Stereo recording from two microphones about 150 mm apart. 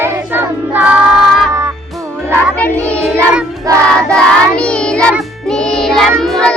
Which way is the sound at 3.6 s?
20° right (ahead or behind).